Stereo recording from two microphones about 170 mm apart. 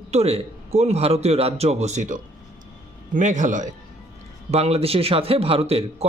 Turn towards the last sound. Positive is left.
turn(degrees=-35)  # may be behind; listen again after turning